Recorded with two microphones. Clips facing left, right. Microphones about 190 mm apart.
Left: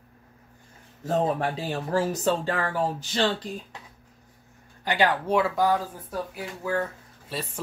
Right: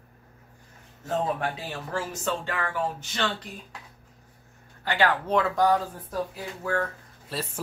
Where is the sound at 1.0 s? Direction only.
35° left (ahead or behind).